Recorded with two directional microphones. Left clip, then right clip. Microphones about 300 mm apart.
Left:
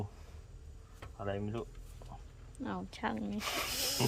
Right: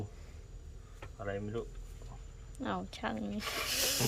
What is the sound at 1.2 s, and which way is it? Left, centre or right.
Speech, left.